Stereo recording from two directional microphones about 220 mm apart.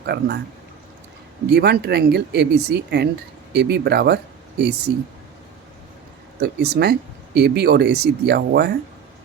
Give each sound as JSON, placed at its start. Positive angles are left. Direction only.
{"t": 0.0, "sound": "speech", "side_deg": -50}
{"t": 1.5, "sound": "speech", "side_deg": -45}
{"t": 6.4, "sound": "speech", "side_deg": -45}